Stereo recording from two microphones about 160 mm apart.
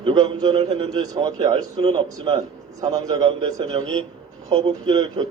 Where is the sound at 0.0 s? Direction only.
25° right (ahead or behind).